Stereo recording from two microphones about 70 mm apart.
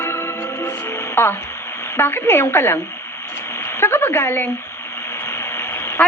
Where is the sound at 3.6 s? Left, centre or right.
Left.